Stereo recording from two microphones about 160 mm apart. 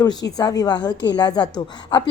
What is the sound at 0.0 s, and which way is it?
A woman's voice, 25° left (ahead or behind).